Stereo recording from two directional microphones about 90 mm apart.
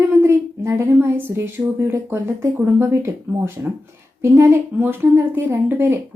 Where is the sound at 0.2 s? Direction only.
30° right (ahead or behind).